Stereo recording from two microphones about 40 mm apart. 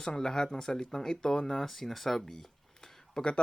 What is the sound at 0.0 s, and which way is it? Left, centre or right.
Speech, centre.